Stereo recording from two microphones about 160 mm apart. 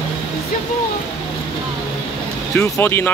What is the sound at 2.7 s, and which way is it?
Speech, 15° left (ahead or behind).